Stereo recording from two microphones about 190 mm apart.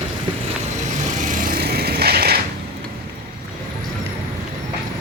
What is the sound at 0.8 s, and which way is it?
Vehicle, 45° right (ahead or behind).